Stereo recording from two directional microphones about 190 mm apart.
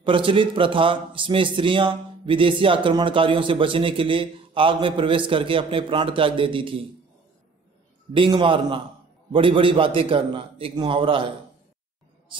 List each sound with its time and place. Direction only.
0.0 s a man's voice: 25° right (ahead or behind)
8.1 s a man's voice: 25° right (ahead or behind)